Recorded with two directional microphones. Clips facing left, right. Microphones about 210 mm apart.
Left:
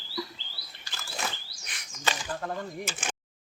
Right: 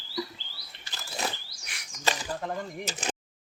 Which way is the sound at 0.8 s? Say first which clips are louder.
Right 2 dB; 35° right (ahead or behind).